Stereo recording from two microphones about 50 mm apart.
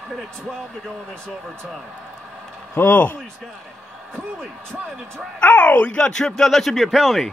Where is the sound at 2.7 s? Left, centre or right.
Left.